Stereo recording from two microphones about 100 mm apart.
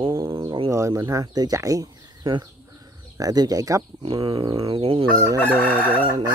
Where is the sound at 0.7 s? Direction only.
30° right (ahead or behind).